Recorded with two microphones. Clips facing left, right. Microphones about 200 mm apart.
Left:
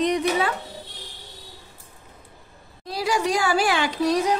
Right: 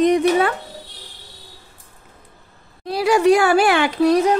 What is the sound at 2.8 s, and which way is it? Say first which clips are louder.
Speech: right 8 dB; 60° right (ahead or behind).